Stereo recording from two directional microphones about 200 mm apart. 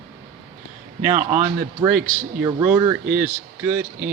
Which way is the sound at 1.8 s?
25° right (ahead or behind).